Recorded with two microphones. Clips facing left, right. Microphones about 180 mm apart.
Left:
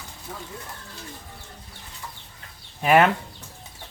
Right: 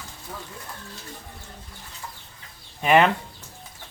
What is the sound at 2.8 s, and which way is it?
Speech, 5° left (ahead or behind).